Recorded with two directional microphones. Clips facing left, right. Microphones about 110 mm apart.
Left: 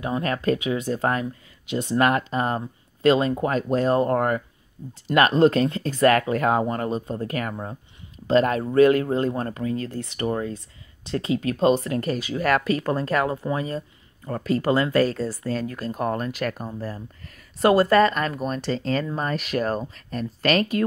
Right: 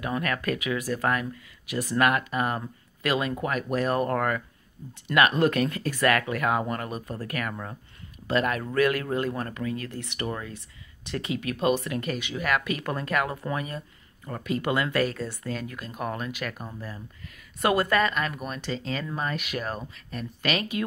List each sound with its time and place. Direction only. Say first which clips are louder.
0.0 s speech: left 4 dB; 25° left (ahead or behind); by 20.8 s 40° left (ahead or behind)